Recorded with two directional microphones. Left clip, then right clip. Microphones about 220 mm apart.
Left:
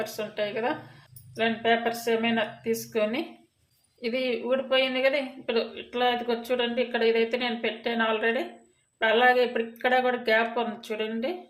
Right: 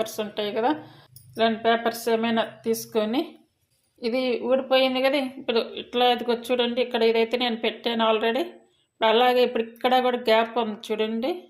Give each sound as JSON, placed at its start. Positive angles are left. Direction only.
{"t": 0.0, "sound": "speech", "side_deg": -30}